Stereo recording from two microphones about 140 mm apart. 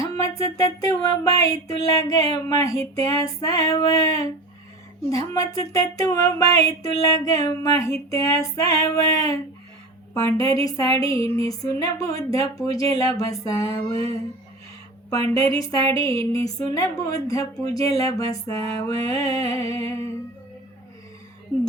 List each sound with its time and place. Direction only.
0.2 s speech: 25° left (ahead or behind)